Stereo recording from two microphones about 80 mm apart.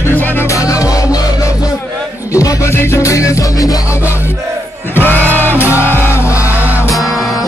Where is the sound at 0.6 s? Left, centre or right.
Left.